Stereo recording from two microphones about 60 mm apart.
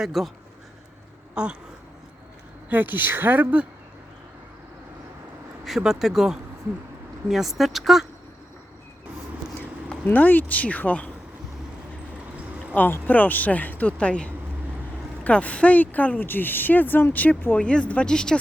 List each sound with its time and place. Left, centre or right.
0.0 s speech: centre
1.4 s speech: centre
2.6 s a woman's voice: right
5.6 s speech: centre
10.1 s speech: left
12.7 s speech: left
17.6 s speech: centre